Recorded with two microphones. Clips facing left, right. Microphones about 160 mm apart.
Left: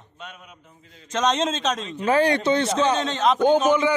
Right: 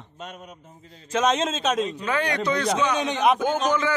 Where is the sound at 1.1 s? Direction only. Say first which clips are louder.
Even; 5° right (ahead or behind).